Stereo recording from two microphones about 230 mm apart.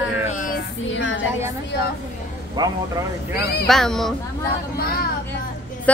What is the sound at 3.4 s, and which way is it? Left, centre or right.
Speech, left.